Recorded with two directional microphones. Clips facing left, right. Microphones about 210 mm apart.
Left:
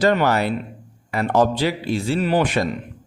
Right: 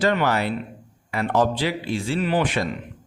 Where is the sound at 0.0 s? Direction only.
40° left (ahead or behind).